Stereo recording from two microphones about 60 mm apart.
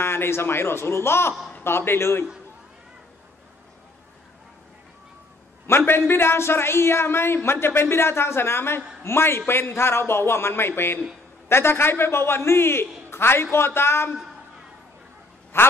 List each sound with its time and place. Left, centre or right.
0.0 s a man's voice: left
5.7 s a man's voice: left
15.5 s a man's voice: left